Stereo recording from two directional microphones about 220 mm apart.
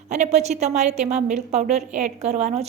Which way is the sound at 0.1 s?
30° right (ahead or behind).